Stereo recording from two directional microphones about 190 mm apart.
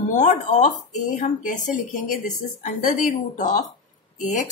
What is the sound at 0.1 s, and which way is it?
A woman's voice, 40° left (ahead or behind).